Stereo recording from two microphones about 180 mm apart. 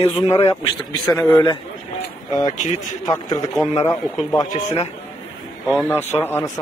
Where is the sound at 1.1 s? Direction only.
15° left (ahead or behind).